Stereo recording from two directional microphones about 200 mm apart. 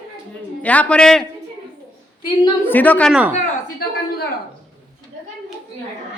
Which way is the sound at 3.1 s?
5° right (ahead or behind).